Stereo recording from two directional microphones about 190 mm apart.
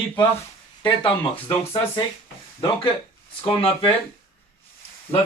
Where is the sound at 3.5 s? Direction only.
30° left (ahead or behind).